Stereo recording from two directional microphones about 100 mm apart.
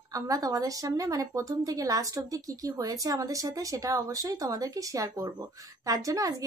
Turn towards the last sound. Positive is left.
turn(degrees=-35)  # may be behind; listen again after turning